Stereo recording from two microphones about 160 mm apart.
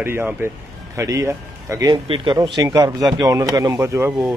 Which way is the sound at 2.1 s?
30° right (ahead or behind).